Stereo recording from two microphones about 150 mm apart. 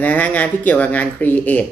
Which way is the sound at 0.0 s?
10° left (ahead or behind).